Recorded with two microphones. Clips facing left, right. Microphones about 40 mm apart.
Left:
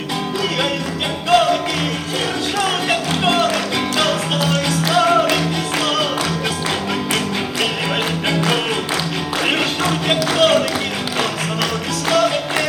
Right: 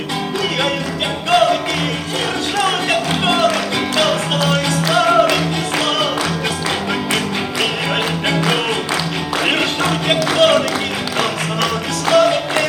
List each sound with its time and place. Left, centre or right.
1.3 s music: centre
2.6 s music: centre
8.3 s music: centre
12.0 s music: centre